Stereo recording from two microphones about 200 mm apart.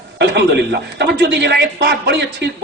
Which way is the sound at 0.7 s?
60° right (ahead or behind).